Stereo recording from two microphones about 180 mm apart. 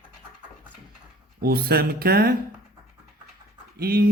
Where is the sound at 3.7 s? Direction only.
60° right (ahead or behind).